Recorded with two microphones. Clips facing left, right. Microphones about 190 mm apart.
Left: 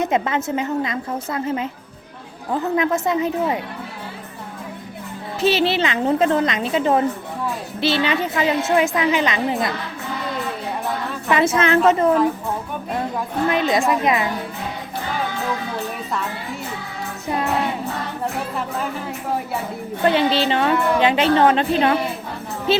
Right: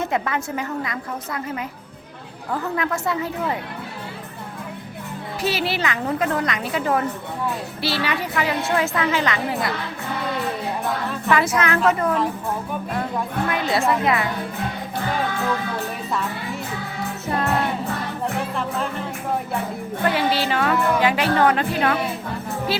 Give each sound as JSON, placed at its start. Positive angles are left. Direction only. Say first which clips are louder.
{"t": 0.0, "sound": "a woman's voice", "louder": "left 4 dB", "side_deg": 20}
{"t": 5.4, "sound": "a woman's voice", "louder": "left 6 dB", "side_deg": 25}
{"t": 11.3, "sound": "a woman's voice", "louder": "left 3 dB", "side_deg": 25}
{"t": 13.5, "sound": "a woman's voice", "louder": "left 3 dB", "side_deg": 20}
{"t": 20.1, "sound": "a woman's voice", "louder": "left 4 dB", "side_deg": 25}